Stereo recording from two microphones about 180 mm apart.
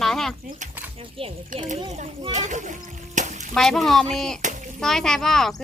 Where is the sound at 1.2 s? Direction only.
30° right (ahead or behind).